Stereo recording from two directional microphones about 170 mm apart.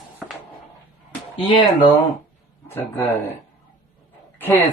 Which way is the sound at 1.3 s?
30° left (ahead or behind).